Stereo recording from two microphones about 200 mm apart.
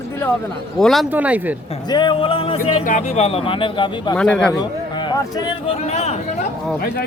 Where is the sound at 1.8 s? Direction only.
20° left (ahead or behind).